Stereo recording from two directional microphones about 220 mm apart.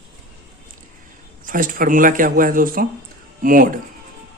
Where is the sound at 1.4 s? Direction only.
40° right (ahead or behind).